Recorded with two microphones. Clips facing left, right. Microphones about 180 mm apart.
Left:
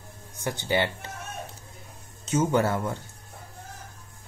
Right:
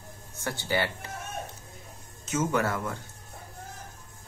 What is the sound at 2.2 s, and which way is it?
Speech, 30° left (ahead or behind).